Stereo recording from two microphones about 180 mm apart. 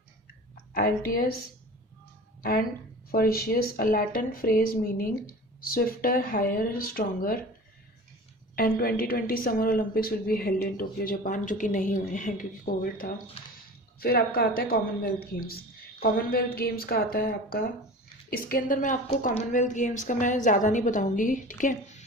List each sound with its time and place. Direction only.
0.5 s a woman's voice: 55° left (ahead or behind)
2.4 s a woman's voice: 55° left (ahead or behind)
8.5 s a woman's voice: 50° left (ahead or behind)
13.4 s speech: 30° left (ahead or behind)
14.0 s a woman's voice: 55° left (ahead or behind)